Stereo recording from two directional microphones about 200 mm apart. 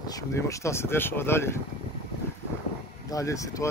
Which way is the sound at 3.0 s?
15° left (ahead or behind).